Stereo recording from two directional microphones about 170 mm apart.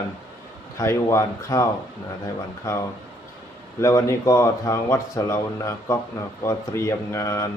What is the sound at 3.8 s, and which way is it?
Speech, 15° left (ahead or behind).